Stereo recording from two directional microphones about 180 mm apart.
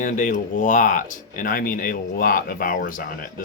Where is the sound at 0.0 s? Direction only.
45° left (ahead or behind).